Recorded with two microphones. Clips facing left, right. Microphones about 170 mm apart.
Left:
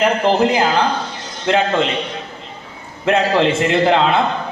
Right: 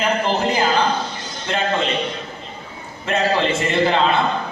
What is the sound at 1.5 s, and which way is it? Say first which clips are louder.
Speech: left 5 dB; 65° left (ahead or behind).